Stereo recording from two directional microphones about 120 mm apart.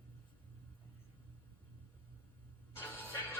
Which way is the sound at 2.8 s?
15° left (ahead or behind).